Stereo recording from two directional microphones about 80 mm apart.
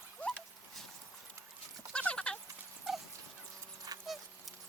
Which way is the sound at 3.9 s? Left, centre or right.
Right.